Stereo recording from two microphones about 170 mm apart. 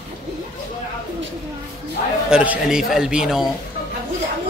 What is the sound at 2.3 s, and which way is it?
A man's voice, 5° right (ahead or behind).